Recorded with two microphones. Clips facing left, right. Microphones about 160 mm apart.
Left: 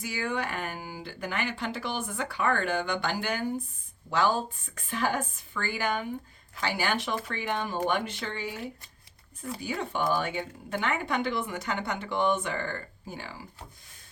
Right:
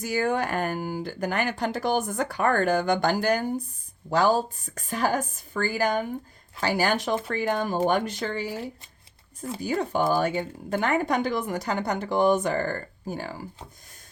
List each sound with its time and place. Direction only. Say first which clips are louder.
0.0 s speech: right 7 dB; 45° right (ahead or behind)